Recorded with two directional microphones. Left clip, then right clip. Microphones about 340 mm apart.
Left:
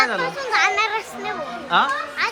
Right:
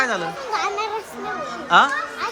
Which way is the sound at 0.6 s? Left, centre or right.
Centre.